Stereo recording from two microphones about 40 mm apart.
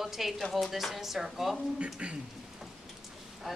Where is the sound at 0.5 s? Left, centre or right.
Centre.